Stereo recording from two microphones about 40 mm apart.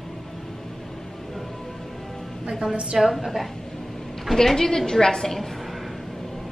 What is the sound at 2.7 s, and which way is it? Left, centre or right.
Speech, right.